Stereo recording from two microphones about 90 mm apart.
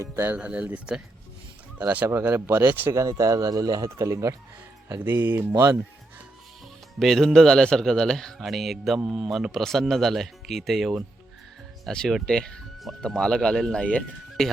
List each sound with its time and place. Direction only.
0.0 s speech: 25° right (ahead or behind)
0.3 s speech: 15° right (ahead or behind)
2.1 s speech: 30° right (ahead or behind)
2.9 s speech: 35° right (ahead or behind)
4.9 s speech: 20° right (ahead or behind)
7.0 s a man's voice: 5° left (ahead or behind)